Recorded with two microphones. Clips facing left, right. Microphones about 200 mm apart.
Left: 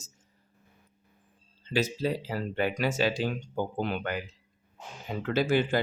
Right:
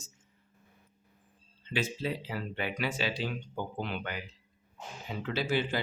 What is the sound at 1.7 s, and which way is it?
Speech, 40° left (ahead or behind).